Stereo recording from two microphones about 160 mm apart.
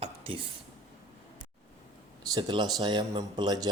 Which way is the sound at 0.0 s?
35° right (ahead or behind).